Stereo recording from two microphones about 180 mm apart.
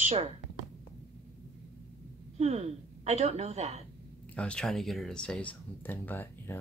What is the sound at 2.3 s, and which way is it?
A woman's voice, 35° right (ahead or behind).